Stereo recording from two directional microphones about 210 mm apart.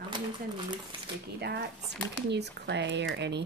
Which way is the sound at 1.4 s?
55° right (ahead or behind).